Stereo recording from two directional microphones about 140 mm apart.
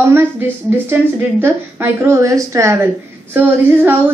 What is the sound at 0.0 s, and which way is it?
A woman's voice, 15° right (ahead or behind).